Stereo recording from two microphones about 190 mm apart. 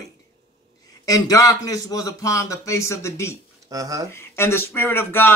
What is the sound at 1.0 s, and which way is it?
Speech, 20° left (ahead or behind).